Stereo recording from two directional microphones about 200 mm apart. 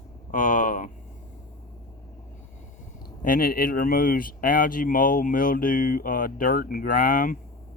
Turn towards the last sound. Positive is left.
turn(degrees=45)  # may be behind; listen again after turning